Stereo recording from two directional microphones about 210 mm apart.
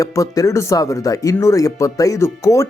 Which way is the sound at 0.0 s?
15° left (ahead or behind).